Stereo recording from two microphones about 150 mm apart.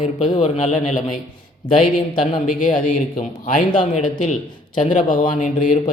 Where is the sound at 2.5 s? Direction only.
65° left (ahead or behind).